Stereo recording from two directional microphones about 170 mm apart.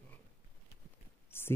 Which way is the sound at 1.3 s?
15° left (ahead or behind).